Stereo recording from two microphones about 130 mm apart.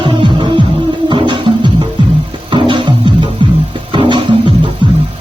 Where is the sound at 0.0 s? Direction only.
40° right (ahead or behind).